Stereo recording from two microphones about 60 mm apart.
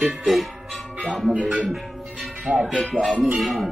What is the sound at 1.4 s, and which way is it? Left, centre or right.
Music, centre.